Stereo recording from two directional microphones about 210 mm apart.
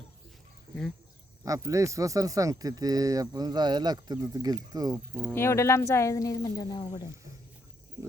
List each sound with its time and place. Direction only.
1.5 s speech: 15° right (ahead or behind)
5.3 s speech: 10° left (ahead or behind)